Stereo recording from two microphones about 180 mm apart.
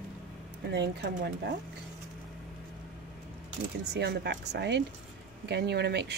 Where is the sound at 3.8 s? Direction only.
70° right (ahead or behind).